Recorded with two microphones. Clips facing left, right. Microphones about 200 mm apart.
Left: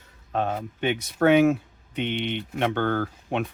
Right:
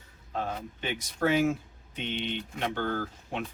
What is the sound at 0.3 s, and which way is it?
Speech, 65° left (ahead or behind).